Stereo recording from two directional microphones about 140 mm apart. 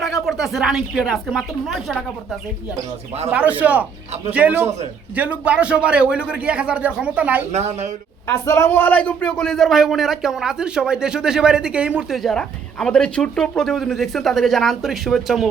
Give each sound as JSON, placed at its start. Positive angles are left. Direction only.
{"t": 0.0, "sound": "speech", "side_deg": 0}
{"t": 3.6, "sound": "a man's voice", "side_deg": -10}
{"t": 7.5, "sound": "a woman's voice", "side_deg": -50}
{"t": 8.4, "sound": "speech", "side_deg": 20}